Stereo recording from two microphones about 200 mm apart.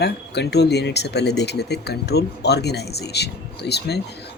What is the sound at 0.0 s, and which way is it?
Speech, 55° left (ahead or behind).